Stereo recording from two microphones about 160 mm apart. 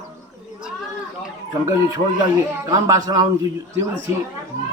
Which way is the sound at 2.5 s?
20° right (ahead or behind).